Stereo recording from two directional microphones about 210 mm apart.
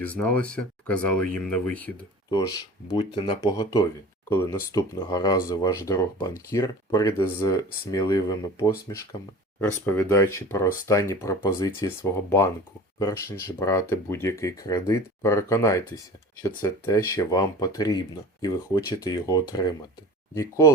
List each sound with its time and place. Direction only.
0.0 s speech: 5° left (ahead or behind)
2.9 s speech: 25° left (ahead or behind)